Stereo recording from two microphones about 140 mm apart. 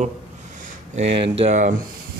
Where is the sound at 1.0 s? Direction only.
45° right (ahead or behind).